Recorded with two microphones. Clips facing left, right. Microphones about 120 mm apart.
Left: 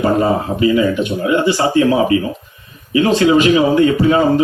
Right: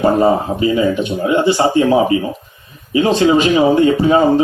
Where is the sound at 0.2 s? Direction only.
30° right (ahead or behind).